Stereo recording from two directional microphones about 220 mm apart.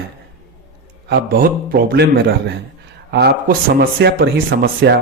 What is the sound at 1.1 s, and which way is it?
A man's voice, 40° right (ahead or behind).